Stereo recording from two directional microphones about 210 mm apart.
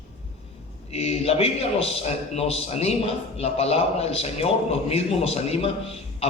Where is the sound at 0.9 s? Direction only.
30° left (ahead or behind).